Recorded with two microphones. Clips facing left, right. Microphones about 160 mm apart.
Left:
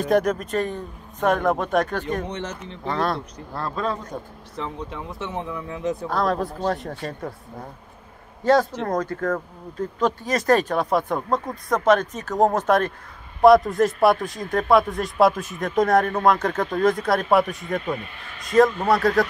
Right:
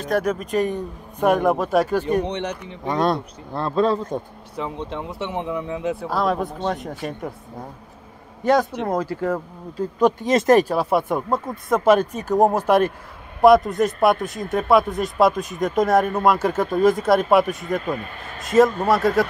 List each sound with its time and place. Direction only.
0.1 s a man's voice: 10° right (ahead or behind)
6.0 s speech: 5° right (ahead or behind)
6.9 s a man's voice: 15° right (ahead or behind)
8.5 s a man's voice: 15° right (ahead or behind)
10.2 s speech: 20° right (ahead or behind)
10.6 s a man's voice: 5° right (ahead or behind)
17.8 s speech: 40° right (ahead or behind)
18.9 s speech: centre (ahead or behind)